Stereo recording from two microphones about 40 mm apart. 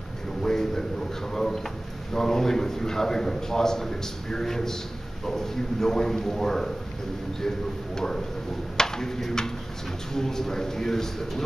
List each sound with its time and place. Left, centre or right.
0.4 s a sound: centre
1.3 s drawer open or close: centre
2.1 s a man's voice: centre